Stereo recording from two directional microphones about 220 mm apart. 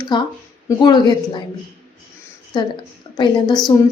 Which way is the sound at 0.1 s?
20° left (ahead or behind).